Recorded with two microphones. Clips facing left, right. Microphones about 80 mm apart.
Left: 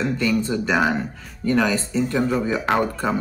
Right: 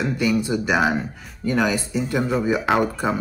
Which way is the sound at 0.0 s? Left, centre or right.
Centre.